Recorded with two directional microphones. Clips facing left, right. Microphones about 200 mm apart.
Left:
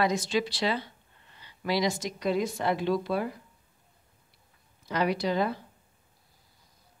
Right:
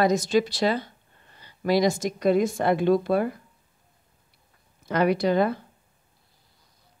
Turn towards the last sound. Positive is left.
turn(degrees=-55)  # may be behind; listen again after turning